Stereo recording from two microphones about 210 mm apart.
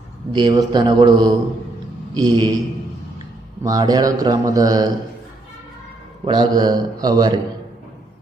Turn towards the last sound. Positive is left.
turn(degrees=-20)  # may be behind; listen again after turning